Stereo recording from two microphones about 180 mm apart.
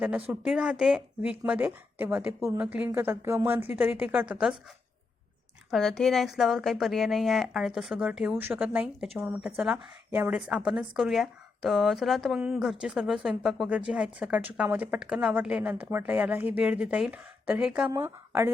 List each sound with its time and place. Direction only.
0.3 s a woman's voice: 5° right (ahead or behind)
5.7 s a woman's voice: centre (ahead or behind)